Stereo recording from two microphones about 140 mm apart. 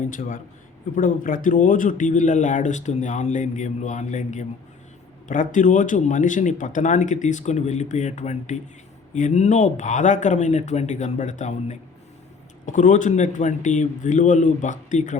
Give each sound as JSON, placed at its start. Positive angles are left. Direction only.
{"t": 0.9, "sound": "speech", "side_deg": 75}